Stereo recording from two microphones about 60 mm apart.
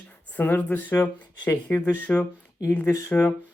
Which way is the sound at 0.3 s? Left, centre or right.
Left.